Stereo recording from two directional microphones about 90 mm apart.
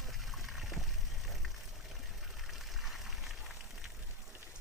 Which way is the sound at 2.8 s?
Centre (ahead or behind).